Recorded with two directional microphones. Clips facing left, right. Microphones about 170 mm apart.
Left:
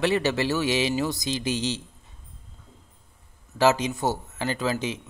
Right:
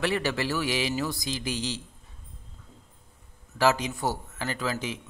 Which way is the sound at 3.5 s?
25° left (ahead or behind).